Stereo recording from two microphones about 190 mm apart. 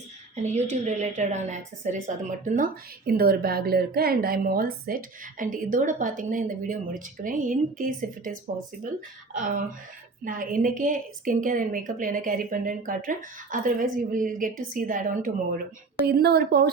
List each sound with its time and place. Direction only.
0.4 s a woman's voice: 35° right (ahead or behind)
9.3 s a woman's voice: 45° right (ahead or behind)